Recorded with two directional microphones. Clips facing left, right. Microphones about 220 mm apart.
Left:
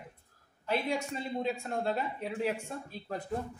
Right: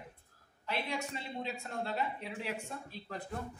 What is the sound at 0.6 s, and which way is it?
A woman's voice, 45° left (ahead or behind).